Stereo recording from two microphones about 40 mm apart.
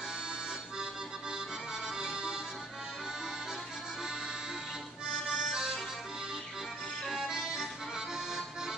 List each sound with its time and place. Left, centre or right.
1.3 s accordion: centre
5.0 s music: centre
7.1 s accordion: centre